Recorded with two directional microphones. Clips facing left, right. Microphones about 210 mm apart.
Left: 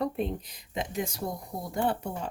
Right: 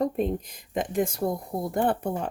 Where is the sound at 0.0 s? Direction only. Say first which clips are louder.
Right 5 dB; 45° right (ahead or behind).